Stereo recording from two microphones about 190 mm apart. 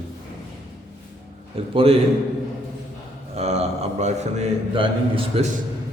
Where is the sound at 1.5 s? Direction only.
30° right (ahead or behind).